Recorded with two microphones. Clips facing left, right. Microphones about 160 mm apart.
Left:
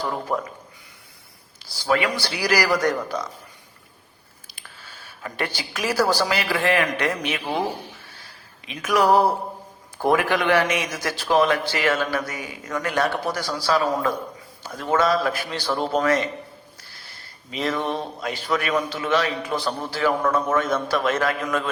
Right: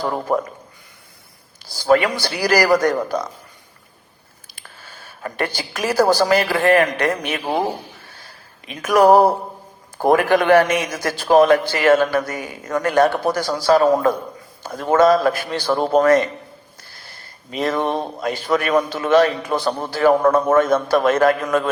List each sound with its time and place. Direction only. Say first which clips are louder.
0.0 s a man's voice: right 5 dB; 45° right (ahead or behind)
1.7 s a man's voice: right 6 dB; 45° right (ahead or behind)
4.5 s a woman's voice: right 3 dB; 45° right (ahead or behind)
8.6 s a man's voice: right 6 dB; 45° right (ahead or behind)
17.5 s a man's voice: right 5 dB; 45° right (ahead or behind)